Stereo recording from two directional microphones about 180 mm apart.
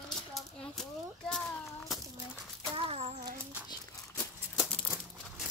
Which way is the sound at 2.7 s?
35° right (ahead or behind).